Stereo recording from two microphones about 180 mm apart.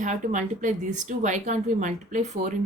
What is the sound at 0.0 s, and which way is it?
A woman's voice, 45° right (ahead or behind).